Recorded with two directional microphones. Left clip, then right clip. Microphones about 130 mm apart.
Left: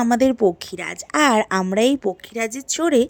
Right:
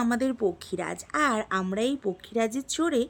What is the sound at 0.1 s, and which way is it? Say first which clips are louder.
A woman's voice: left 10 dB; 35° left (ahead or behind).